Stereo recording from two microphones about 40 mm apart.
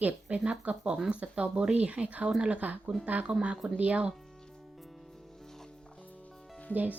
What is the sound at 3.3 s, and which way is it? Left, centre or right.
Speech, right.